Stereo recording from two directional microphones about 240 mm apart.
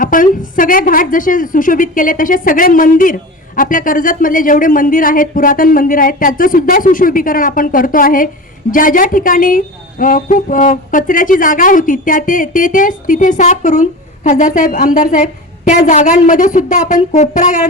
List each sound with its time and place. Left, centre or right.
0.0 s a woman's voice: left